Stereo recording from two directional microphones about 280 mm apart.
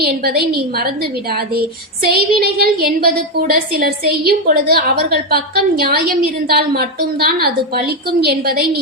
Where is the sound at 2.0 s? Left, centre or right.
Right.